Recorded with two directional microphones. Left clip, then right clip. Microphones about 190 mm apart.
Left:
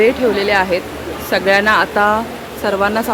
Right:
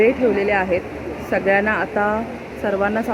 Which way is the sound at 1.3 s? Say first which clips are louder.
Left 5 dB; 15° left (ahead or behind).